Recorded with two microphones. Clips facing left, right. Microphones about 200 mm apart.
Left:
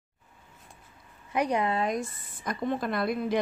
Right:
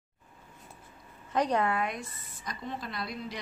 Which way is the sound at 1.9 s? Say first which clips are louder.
Left 8 dB; 50° left (ahead or behind).